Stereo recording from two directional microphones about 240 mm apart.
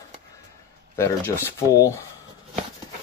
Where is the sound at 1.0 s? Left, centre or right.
Centre.